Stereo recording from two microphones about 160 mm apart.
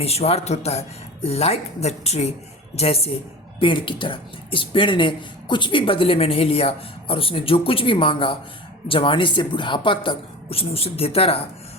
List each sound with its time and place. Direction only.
0.0 s speech: 40° left (ahead or behind)